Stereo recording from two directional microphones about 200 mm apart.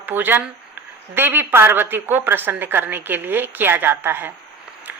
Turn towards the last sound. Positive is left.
turn(degrees=-10)  # may be behind; listen again after turning